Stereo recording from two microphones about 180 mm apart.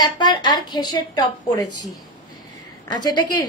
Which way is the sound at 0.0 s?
25° left (ahead or behind).